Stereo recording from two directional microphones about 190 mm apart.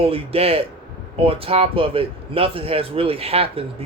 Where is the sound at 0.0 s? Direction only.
30° right (ahead or behind).